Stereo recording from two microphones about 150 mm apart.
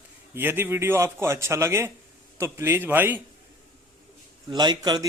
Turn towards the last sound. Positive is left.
turn(degrees=-30)  # may be behind; listen again after turning